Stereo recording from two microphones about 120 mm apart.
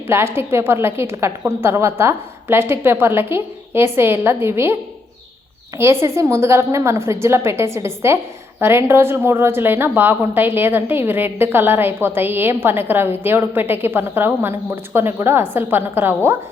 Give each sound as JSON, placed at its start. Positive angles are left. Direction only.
{"t": 0.1, "sound": "a woman's voice", "side_deg": -20}